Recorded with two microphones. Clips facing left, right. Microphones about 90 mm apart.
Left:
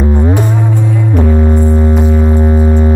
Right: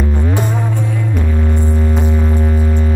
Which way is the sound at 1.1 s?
25° left (ahead or behind).